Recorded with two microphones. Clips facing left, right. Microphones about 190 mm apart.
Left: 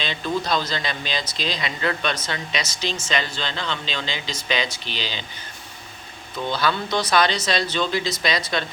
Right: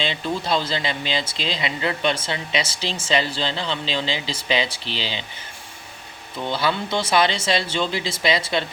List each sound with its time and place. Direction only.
0.0 s speech: 25° right (ahead or behind)
6.5 s speech: 25° right (ahead or behind)